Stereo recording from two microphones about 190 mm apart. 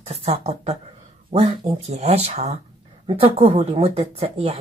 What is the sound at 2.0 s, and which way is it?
Speech, 35° right (ahead or behind).